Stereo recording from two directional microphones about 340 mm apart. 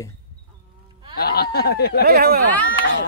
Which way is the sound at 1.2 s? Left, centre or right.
Left.